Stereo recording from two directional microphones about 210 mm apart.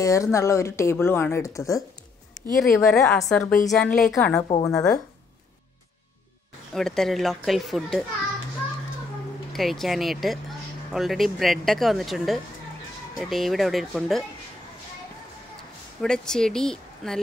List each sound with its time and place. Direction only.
0.0 s speech: 15° left (ahead or behind)
2.6 s speech: 5° left (ahead or behind)
4.5 s a woman's voice: 20° left (ahead or behind)
6.7 s speech: centre (ahead or behind)
9.5 s speech: centre (ahead or behind)
16.0 s speech: 5° left (ahead or behind)